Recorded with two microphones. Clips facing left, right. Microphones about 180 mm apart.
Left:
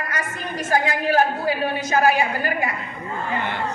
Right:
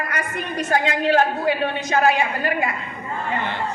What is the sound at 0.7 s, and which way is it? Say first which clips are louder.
A woman's voice: right 1 dB; 25° right (ahead or behind).